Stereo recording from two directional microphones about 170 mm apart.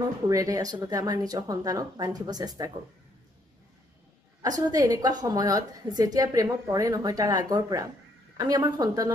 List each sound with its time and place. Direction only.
0.0 s a woman's voice: 20° right (ahead or behind)
4.4 s a woman's voice: 20° right (ahead or behind)